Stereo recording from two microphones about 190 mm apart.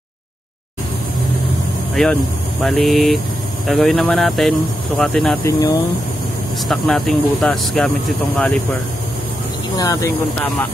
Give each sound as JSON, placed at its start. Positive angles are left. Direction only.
{"t": 2.0, "sound": "speech", "side_deg": 0}
{"t": 5.4, "sound": "speech", "side_deg": 15}
{"t": 6.7, "sound": "speech", "side_deg": 0}
{"t": 9.8, "sound": "speech", "side_deg": 15}